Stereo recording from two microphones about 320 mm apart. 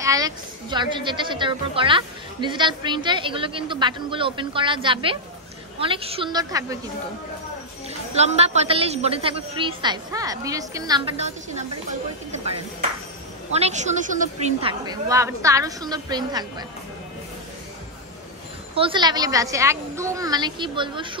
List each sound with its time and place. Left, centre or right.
0.0 s a woman's voice: centre
8.2 s a woman's voice: right
13.5 s a woman's voice: right
18.8 s a woman's voice: centre